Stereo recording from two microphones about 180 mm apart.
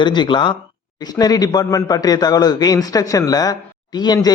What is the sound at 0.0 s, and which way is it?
A man's voice, 25° left (ahead or behind).